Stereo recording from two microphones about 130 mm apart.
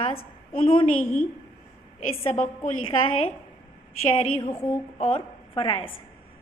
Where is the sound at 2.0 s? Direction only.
45° left (ahead or behind).